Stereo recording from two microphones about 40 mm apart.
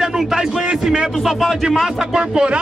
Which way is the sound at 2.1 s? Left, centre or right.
Right.